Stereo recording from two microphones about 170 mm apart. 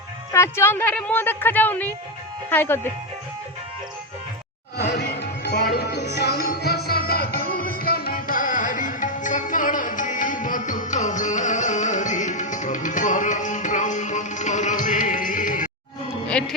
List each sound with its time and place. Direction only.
0.3 s a woman's voice: 15° left (ahead or behind)
4.9 s music: 75° left (ahead or behind); by 15.7 s 50° left (ahead or behind)
16.4 s music: 5° left (ahead or behind)